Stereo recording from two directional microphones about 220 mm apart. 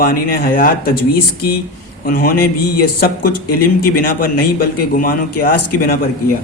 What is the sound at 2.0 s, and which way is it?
A man's voice, 40° left (ahead or behind).